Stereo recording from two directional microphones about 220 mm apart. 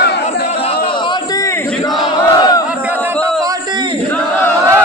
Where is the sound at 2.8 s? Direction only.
10° right (ahead or behind).